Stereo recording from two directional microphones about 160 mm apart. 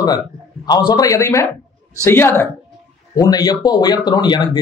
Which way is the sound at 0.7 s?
25° left (ahead or behind).